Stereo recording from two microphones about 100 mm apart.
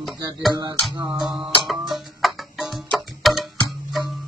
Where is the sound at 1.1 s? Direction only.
5° right (ahead or behind).